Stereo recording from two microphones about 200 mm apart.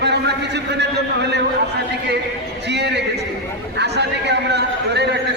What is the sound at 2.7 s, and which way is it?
A man's voice, 55° right (ahead or behind).